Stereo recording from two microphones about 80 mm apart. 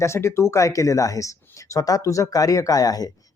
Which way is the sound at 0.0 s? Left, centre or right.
Left.